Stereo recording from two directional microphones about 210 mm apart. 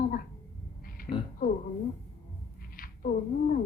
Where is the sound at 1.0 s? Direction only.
45° left (ahead or behind).